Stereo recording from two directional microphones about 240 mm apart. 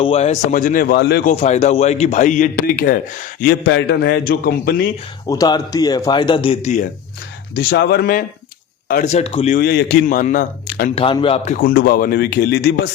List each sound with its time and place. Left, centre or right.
0.0 s a man's voice: left
5.3 s speech: centre
7.5 s a man's voice: left
9.6 s a man's voice: left
11.0 s a man's voice: left